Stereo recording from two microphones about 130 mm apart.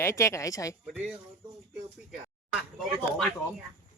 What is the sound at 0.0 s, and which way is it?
Speech, 20° left (ahead or behind).